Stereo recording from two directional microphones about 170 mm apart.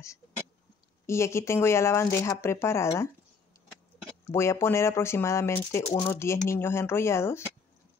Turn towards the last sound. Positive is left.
turn(degrees=15)  # may be behind; listen again after turning